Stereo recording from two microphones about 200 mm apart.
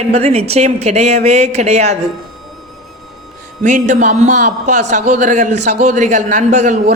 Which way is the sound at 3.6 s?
40° right (ahead or behind).